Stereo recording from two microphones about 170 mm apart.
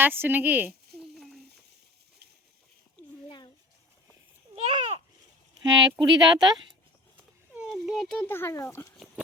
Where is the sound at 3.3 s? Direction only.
25° left (ahead or behind).